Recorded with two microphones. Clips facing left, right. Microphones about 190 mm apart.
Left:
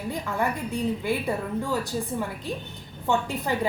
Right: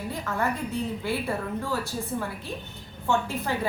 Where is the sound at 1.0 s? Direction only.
15° left (ahead or behind).